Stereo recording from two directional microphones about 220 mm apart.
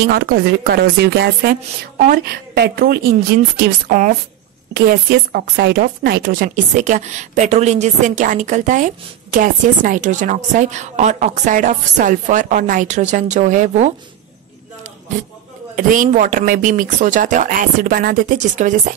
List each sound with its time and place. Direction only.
0.1 s a woman's voice: 45° right (ahead or behind)
15.7 s speech: 35° right (ahead or behind)